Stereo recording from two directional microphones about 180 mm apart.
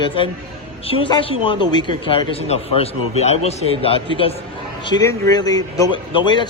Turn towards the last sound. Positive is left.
turn(degrees=25)  # may be behind; listen again after turning